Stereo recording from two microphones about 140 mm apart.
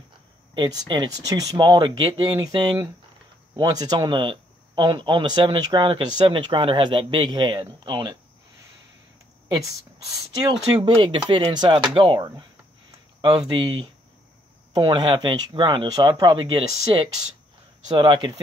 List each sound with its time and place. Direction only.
0.6 s speech: 30° right (ahead or behind)
9.6 s speech: 25° right (ahead or behind)